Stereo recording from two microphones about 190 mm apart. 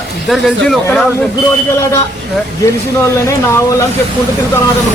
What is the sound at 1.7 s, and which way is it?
Speech, 15° left (ahead or behind).